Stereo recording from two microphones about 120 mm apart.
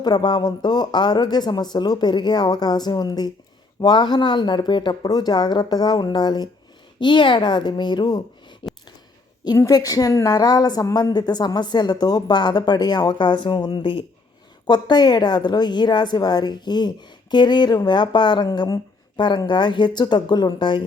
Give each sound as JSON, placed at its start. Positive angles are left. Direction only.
{"t": 0.0, "sound": "a woman's voice", "side_deg": 35}
{"t": 9.6, "sound": "a woman's voice", "side_deg": 30}